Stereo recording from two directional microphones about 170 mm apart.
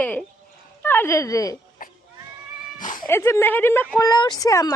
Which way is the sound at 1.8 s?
55° left (ahead or behind).